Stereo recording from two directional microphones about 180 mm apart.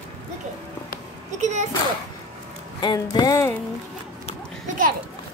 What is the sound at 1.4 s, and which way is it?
Speech, 40° right (ahead or behind).